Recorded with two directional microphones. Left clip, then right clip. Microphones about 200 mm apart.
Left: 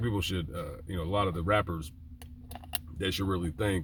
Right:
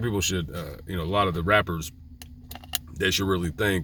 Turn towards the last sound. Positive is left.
turn(degrees=-20)  # may be behind; listen again after turning